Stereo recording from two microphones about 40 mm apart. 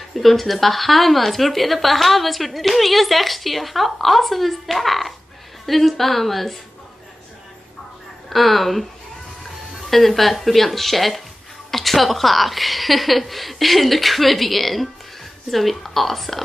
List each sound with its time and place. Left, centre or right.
0.1 s a woman's voice: centre
8.3 s a woman's voice: centre
9.8 s a woman's voice: centre